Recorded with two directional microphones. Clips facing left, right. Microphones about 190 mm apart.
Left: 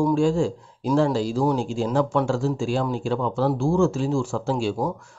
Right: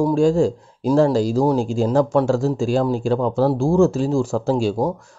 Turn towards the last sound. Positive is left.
turn(degrees=-40)  # may be behind; listen again after turning